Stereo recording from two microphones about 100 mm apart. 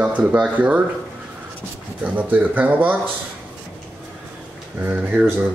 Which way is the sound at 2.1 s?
15° right (ahead or behind).